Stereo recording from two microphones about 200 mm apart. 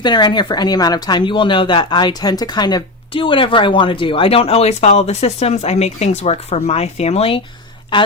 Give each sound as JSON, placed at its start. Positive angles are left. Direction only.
{"t": 0.0, "sound": "speech", "side_deg": 20}